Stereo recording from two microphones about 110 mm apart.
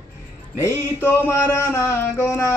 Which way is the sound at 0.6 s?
20° left (ahead or behind).